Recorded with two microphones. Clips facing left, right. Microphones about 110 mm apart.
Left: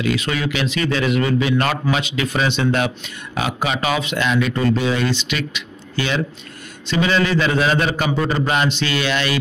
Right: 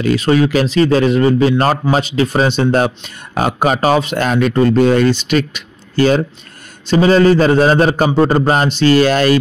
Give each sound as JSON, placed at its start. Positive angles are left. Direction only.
{"t": 0.0, "sound": "a man's voice", "side_deg": -40}